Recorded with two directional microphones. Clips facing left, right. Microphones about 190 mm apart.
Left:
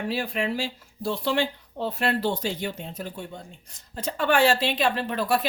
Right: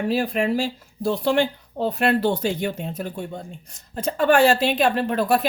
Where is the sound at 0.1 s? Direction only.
45° right (ahead or behind).